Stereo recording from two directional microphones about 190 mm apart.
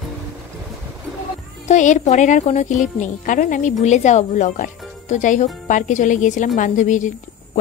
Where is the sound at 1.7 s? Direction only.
40° left (ahead or behind).